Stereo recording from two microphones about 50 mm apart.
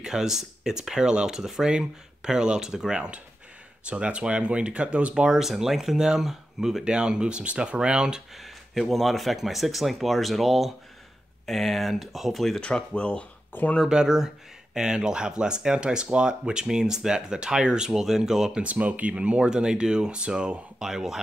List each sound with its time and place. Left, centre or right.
0.0 s speech: centre
5.1 s speech: centre
6.8 s speech: centre
8.4 s speech: centre
12.5 s speech: centre
13.5 s speech: left
13.8 s speech: centre
18.6 s speech: right; by 21.2 s centre